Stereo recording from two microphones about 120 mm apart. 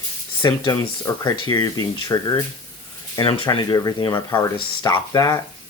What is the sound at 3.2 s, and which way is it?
Speech, 45° left (ahead or behind).